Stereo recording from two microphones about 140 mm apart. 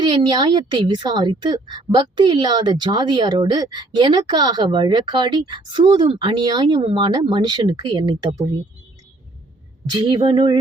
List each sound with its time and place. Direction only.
0.0 s a woman's voice: 35° right (ahead or behind)
9.9 s a woman's voice: 35° right (ahead or behind)